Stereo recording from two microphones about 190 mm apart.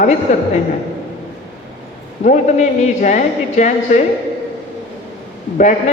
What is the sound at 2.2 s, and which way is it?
A man's voice, 40° left (ahead or behind).